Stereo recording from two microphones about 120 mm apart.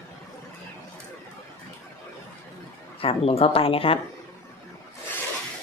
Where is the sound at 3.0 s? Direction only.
55° left (ahead or behind).